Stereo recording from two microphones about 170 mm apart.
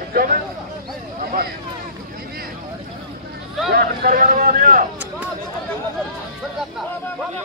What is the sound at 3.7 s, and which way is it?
A man's voice, 65° right (ahead or behind).